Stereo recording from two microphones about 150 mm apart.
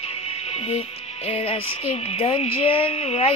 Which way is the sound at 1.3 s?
40° left (ahead or behind).